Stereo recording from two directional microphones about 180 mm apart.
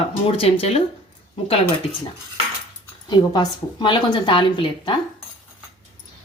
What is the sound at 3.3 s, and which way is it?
Speech, 25° left (ahead or behind).